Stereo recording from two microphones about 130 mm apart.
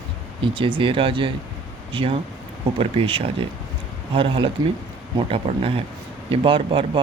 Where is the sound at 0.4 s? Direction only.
40° right (ahead or behind).